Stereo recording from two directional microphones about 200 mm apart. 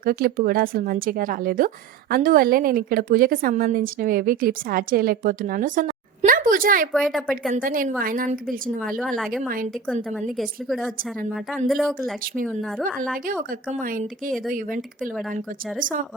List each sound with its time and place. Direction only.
0.0 s speech: 45° right (ahead or behind)
6.9 s a woman's voice: centre (ahead or behind)
7.5 s speech: 45° right (ahead or behind)
8.9 s a woman's voice: centre (ahead or behind)
11.7 s a woman's voice: centre (ahead or behind)
15.8 s speech: 40° right (ahead or behind)